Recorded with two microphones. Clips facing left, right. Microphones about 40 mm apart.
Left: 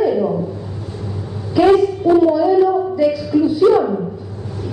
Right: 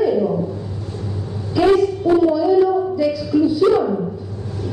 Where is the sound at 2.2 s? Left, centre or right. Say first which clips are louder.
Left 2 dB; centre.